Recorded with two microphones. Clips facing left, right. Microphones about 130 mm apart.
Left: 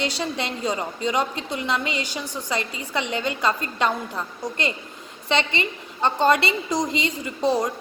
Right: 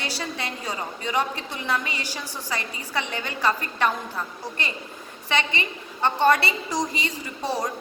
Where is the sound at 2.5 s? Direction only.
20° left (ahead or behind).